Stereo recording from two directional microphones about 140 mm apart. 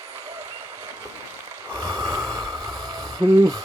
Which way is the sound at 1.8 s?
25° right (ahead or behind).